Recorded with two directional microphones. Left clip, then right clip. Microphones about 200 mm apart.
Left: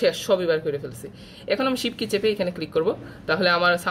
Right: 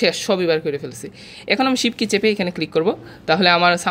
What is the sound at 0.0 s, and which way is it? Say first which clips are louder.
Speech: right 3 dB; 30° right (ahead or behind).